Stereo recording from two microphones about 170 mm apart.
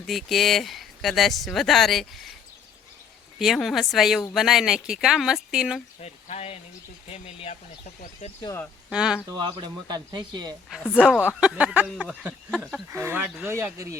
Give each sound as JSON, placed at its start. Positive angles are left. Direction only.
{"t": 0.0, "sound": "speech", "side_deg": 0}
{"t": 3.3, "sound": "speech", "side_deg": 0}
{"t": 6.0, "sound": "speech", "side_deg": 40}
{"t": 8.9, "sound": "speech", "side_deg": -5}
{"t": 9.6, "sound": "speech", "side_deg": -25}
{"t": 10.9, "sound": "speech", "side_deg": -5}
{"t": 12.9, "sound": "speech", "side_deg": -15}